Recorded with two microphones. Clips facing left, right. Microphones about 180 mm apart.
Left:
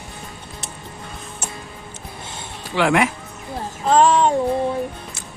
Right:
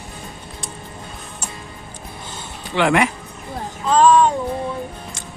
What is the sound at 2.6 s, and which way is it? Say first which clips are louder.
Speech: right 1 dB; centre (ahead or behind).